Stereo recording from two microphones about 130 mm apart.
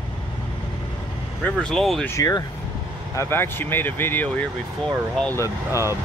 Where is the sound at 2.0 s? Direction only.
25° left (ahead or behind).